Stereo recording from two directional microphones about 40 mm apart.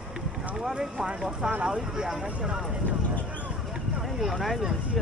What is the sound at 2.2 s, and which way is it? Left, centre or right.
Speech, right.